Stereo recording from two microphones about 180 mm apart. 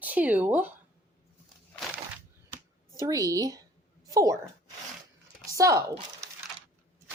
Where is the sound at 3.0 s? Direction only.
20° right (ahead or behind).